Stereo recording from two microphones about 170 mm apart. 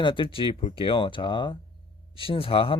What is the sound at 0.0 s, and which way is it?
Speech, 30° left (ahead or behind).